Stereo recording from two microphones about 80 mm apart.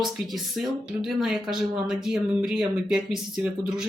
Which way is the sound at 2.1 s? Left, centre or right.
Centre.